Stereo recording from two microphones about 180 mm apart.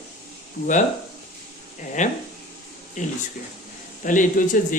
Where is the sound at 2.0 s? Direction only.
40° left (ahead or behind).